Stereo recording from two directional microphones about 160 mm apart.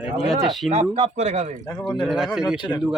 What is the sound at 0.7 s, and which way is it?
Speech, 45° right (ahead or behind).